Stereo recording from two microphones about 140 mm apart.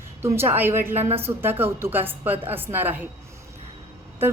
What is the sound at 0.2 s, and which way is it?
A woman's voice, 15° right (ahead or behind).